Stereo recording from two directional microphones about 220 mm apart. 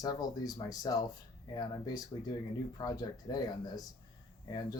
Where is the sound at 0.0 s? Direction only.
15° left (ahead or behind).